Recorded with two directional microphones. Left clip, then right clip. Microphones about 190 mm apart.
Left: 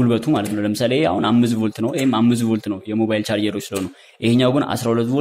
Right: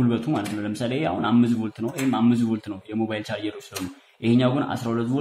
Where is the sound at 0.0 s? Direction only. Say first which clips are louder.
Left 6 dB; 40° left (ahead or behind).